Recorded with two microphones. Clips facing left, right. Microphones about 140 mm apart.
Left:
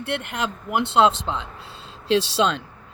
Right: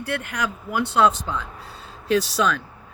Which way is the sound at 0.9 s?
25° left (ahead or behind).